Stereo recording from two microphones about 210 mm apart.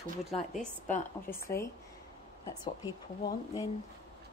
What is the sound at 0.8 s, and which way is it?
Speech, 35° left (ahead or behind).